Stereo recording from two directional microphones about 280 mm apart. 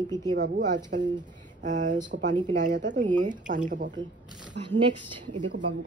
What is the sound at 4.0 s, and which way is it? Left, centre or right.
Speech, centre.